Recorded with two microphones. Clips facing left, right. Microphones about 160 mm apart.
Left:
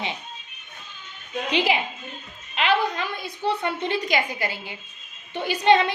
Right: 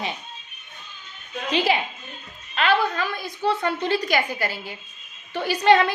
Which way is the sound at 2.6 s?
15° left (ahead or behind).